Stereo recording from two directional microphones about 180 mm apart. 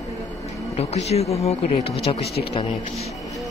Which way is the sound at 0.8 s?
35° left (ahead or behind).